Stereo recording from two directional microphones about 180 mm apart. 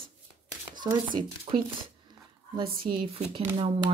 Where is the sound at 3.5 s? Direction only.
35° right (ahead or behind).